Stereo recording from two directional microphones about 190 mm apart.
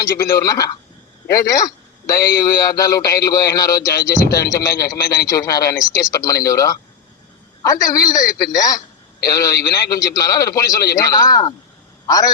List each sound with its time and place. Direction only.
0.0 s a man's voice: 15° left (ahead or behind)